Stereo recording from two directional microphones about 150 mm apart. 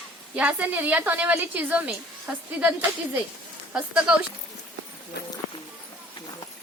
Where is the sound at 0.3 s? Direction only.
10° right (ahead or behind).